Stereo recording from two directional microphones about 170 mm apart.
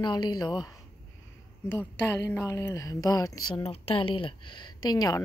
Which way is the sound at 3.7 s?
35° left (ahead or behind).